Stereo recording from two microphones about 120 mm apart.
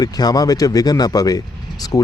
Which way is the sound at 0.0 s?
35° left (ahead or behind).